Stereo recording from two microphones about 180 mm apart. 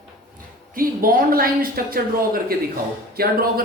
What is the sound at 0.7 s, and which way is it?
A man's voice, 50° right (ahead or behind).